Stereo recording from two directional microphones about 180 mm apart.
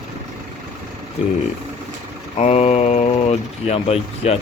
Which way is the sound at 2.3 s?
35° left (ahead or behind).